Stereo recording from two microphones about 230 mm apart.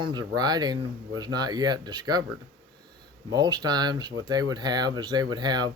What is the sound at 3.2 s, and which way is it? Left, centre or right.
Speech, centre.